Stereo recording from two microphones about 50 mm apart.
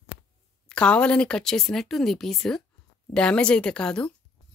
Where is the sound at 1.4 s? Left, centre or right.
Centre.